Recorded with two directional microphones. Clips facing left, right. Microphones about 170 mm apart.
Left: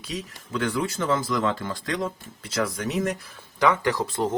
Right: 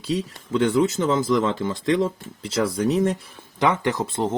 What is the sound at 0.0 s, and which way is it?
A man's voice, 25° right (ahead or behind).